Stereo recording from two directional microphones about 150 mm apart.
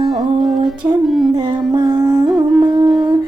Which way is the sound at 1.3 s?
30° right (ahead or behind).